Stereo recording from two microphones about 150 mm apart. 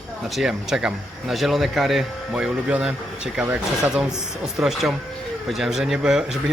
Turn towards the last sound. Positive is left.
turn(degrees=-5)  # may be behind; listen again after turning